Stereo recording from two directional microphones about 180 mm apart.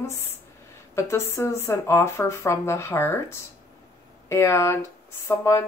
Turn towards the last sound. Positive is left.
turn(degrees=15)  # may be behind; listen again after turning